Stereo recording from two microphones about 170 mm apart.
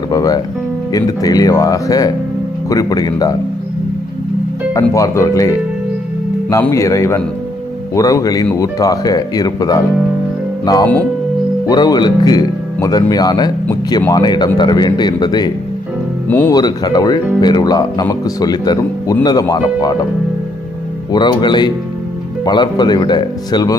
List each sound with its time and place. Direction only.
0.1 s speech: 20° left (ahead or behind)
4.7 s speech: 20° left (ahead or behind)
16.3 s speech: 10° left (ahead or behind)
16.6 s speech: 25° left (ahead or behind)
21.1 s speech: 25° left (ahead or behind)